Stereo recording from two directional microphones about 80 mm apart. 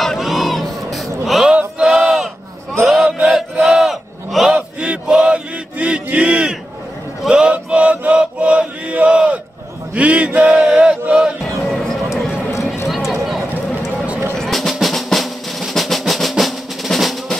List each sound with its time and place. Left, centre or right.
0.0 s a sound: centre
2.8 s chant: centre
3.6 s battle cry: centre
4.6 s chant: centre
9.9 s a sound: centre
10.5 s chant: centre
11.6 s music: centre
12.8 s a sound: centre
14.3 s drum roll: centre